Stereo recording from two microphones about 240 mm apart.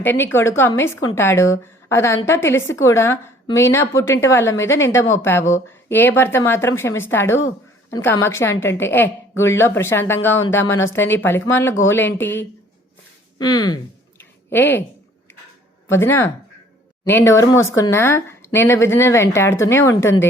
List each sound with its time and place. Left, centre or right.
0.0 s a woman's voice: centre
14.2 s a sound: centre
15.9 s a woman's voice: centre